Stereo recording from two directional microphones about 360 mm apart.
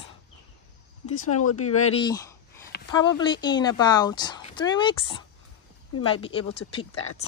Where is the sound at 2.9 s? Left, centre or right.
Centre.